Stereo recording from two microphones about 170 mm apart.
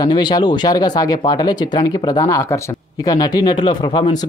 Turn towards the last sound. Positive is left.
turn(degrees=25)  # may be behind; listen again after turning